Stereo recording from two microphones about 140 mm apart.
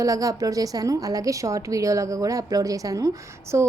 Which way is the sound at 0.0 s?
25° right (ahead or behind).